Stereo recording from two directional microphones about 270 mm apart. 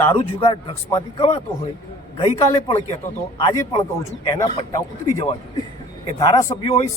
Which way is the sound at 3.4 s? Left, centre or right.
Centre.